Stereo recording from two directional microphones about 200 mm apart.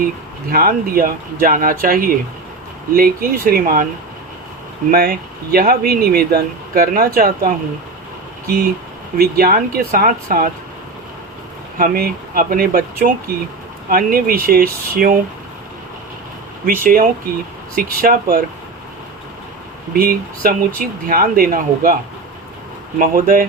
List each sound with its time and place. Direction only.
0.5 s speech: 45° right (ahead or behind)
4.9 s speech: 45° right (ahead or behind)
9.1 s speech: 45° right (ahead or behind)
11.8 s speech: 45° right (ahead or behind)
16.6 s speech: 45° right (ahead or behind)
19.9 s speech: 45° right (ahead or behind)
23.0 s speech: 45° right (ahead or behind)